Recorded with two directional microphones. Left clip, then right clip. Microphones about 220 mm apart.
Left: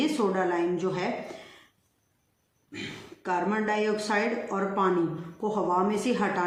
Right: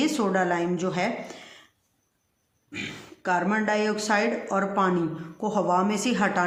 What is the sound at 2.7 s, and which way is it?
A woman's voice, 45° right (ahead or behind).